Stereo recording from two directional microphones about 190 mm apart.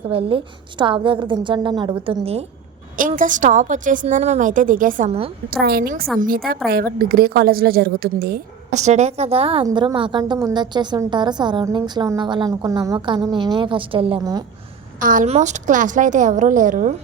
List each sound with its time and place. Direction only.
0.1 s a woman's voice: 30° right (ahead or behind)
3.2 s a woman's voice: 40° right (ahead or behind)
5.5 s a woman's voice: 55° right (ahead or behind)
8.7 s a woman's voice: 35° right (ahead or behind)
15.0 s a woman's voice: 45° right (ahead or behind)